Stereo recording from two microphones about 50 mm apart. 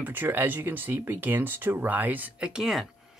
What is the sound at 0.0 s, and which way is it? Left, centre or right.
Speech, right.